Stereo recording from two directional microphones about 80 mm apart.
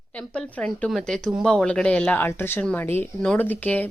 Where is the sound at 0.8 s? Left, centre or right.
Centre.